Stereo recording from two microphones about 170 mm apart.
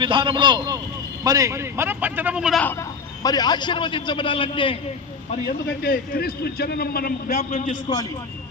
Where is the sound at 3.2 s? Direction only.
25° left (ahead or behind).